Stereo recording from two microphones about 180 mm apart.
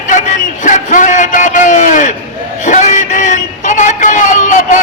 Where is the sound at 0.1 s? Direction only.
45° left (ahead or behind).